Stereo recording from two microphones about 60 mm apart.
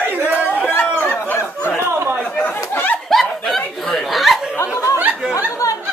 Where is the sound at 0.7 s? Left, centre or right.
Left.